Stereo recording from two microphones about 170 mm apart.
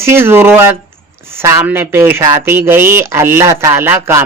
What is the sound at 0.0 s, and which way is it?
Speech, 15° right (ahead or behind).